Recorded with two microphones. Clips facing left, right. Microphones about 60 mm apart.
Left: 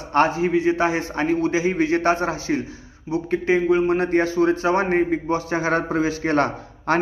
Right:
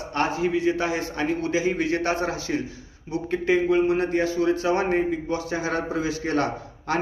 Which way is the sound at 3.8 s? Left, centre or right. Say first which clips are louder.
Left 3 dB; left.